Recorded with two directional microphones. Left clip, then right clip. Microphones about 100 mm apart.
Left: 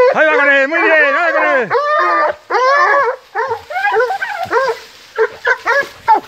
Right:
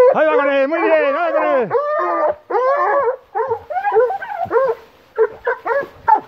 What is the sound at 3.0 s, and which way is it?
Dog, 40° right (ahead or behind).